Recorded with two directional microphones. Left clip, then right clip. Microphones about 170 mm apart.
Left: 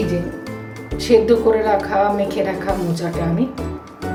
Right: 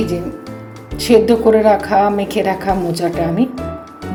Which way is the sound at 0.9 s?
45° right (ahead or behind).